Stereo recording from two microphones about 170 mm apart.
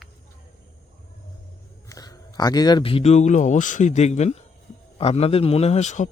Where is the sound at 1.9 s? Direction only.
20° left (ahead or behind).